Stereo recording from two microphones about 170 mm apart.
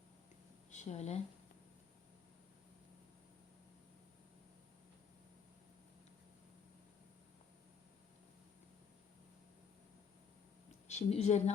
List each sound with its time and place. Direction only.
0.7 s speech: 40° left (ahead or behind)
10.8 s a woman's voice: 40° left (ahead or behind)